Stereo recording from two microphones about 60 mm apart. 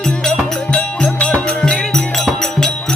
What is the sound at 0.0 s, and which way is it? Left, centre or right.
Music, centre.